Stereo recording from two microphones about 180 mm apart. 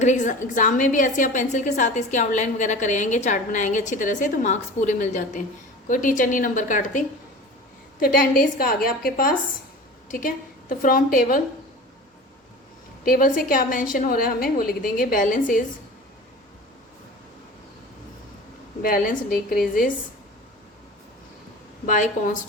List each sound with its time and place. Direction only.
0.0 s a woman's voice: 45° left (ahead or behind)
13.1 s a woman's voice: 50° left (ahead or behind)
18.8 s a woman's voice: 55° left (ahead or behind)
21.8 s a woman's voice: 45° left (ahead or behind)